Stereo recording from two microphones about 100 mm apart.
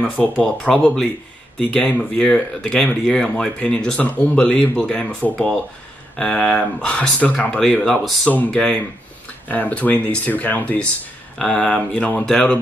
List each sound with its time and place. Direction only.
0.0 s speech: 15° left (ahead or behind)
8.3 s speech: 15° left (ahead or behind)